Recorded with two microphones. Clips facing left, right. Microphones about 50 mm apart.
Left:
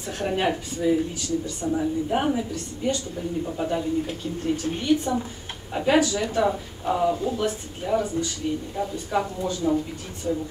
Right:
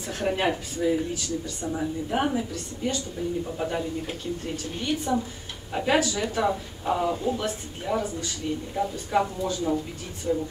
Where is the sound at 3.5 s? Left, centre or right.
Centre.